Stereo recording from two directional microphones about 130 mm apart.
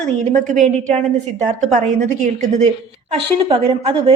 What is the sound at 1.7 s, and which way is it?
Speech, 65° right (ahead or behind).